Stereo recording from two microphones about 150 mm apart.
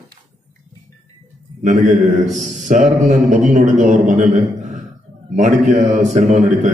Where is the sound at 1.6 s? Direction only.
55° right (ahead or behind).